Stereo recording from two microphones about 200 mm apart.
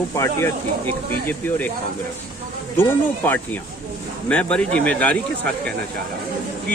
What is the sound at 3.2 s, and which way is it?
Speech, 10° left (ahead or behind).